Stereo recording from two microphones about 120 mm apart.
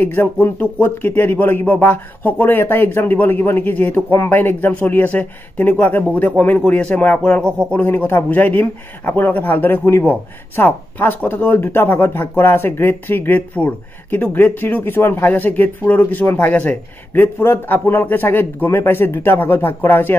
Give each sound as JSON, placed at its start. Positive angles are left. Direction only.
{"t": 0.0, "sound": "speech", "side_deg": 15}